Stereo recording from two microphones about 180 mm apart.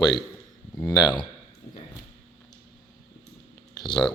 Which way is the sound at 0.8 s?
20° left (ahead or behind).